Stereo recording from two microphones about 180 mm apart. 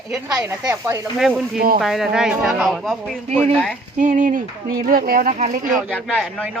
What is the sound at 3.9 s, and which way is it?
Speech, 45° right (ahead or behind).